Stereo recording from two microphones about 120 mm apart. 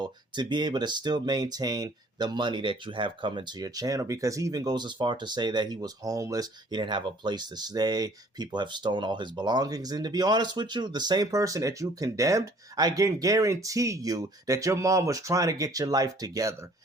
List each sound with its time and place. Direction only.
0.0 s speech: 40° right (ahead or behind)